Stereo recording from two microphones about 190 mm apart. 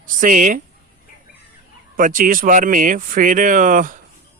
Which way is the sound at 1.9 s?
45° right (ahead or behind).